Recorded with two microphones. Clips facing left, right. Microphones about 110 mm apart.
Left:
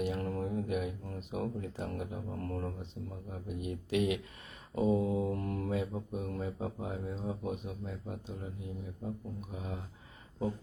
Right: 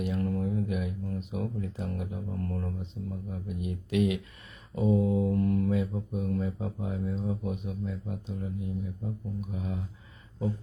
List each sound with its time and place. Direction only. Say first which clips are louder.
0.0 s speech: right 4 dB; 40° left (ahead or behind)
4.7 s mantra: right 3 dB; 35° left (ahead or behind)
6.8 s speech: right 8 dB; 45° left (ahead or behind)
9.5 s speech: right 5 dB; 40° left (ahead or behind)